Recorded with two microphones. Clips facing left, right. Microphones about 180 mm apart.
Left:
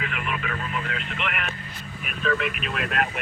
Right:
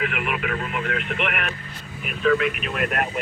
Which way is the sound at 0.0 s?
65° right (ahead or behind).